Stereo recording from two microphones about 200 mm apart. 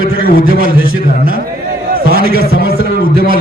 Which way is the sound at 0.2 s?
50° left (ahead or behind).